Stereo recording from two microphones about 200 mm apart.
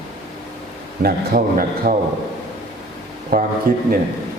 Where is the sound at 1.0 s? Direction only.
50° right (ahead or behind).